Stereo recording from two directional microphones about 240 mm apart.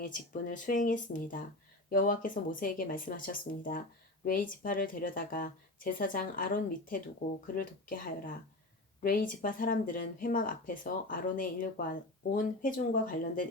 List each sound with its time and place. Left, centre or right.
0.0 s speech: left